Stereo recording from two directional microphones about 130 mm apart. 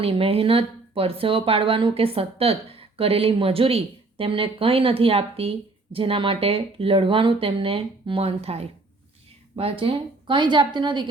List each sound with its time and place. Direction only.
0.0 s a woman's voice: 45° right (ahead or behind)